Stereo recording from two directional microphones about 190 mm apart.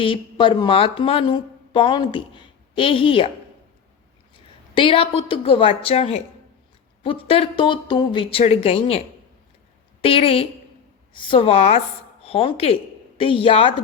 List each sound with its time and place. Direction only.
0.0 s speech: 25° left (ahead or behind)
4.7 s speech: 25° left (ahead or behind)
10.0 s a woman's voice: 30° left (ahead or behind)